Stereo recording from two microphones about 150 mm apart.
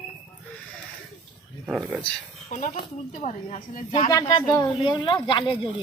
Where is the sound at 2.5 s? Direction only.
55° left (ahead or behind).